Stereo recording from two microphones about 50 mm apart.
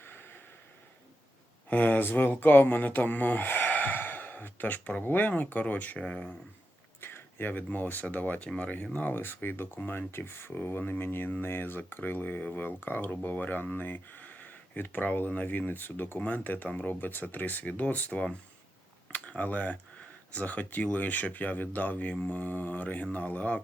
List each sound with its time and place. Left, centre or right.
0.0 s a sound: left
1.7 s speech: left
5.0 s speech: left
7.0 s a sound: left
7.5 s speech: left
9.1 s speech: left
10.6 s speech: left
19.4 s speech: left